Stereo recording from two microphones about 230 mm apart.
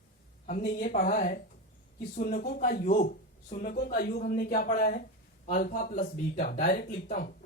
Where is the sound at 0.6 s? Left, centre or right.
Left.